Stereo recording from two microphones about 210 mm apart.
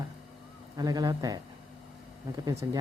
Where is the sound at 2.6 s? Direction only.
15° right (ahead or behind).